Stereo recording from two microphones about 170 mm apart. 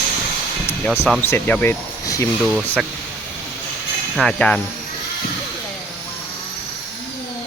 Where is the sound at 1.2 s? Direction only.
10° left (ahead or behind).